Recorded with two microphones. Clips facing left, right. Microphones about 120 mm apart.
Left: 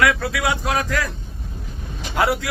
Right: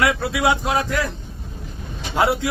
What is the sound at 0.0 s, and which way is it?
A man's voice, 25° right (ahead or behind).